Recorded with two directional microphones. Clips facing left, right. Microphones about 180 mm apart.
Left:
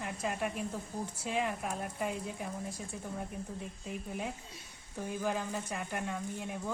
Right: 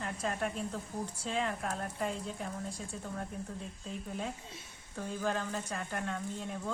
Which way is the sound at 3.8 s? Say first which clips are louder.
Even; 15° left (ahead or behind).